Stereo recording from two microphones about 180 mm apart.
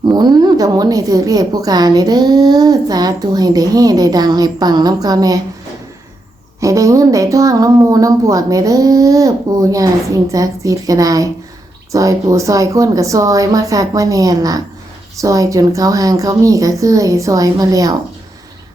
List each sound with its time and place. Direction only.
0.1 s a woman's voice: 25° right (ahead or behind)
6.6 s a woman's voice: 15° right (ahead or behind)